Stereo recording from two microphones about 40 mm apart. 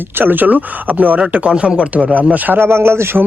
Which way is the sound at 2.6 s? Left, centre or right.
Right.